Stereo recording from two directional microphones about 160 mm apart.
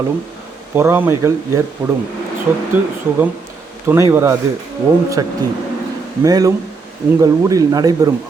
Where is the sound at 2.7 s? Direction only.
15° right (ahead or behind).